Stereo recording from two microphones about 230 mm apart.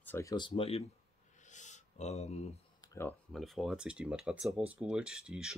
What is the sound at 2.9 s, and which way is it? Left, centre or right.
Speech, centre.